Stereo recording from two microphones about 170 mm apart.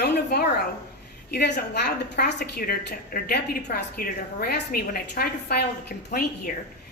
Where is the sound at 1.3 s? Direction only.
70° left (ahead or behind).